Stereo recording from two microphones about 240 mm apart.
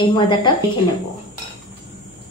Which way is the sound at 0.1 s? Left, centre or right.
Centre.